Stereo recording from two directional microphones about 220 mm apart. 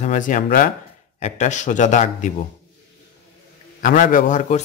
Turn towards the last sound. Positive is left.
turn(degrees=35)  # may be behind; listen again after turning